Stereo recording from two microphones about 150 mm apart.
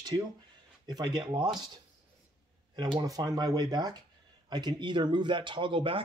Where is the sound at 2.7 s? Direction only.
25° right (ahead or behind).